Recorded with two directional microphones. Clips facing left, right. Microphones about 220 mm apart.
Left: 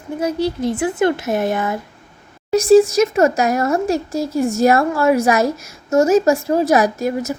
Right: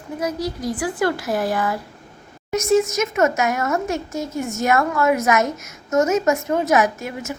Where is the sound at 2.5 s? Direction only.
35° left (ahead or behind).